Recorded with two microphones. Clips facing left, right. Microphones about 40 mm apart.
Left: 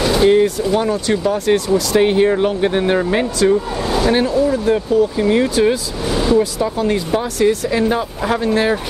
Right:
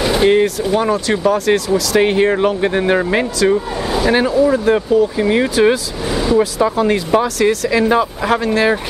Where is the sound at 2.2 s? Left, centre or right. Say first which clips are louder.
Right 1 dB; right.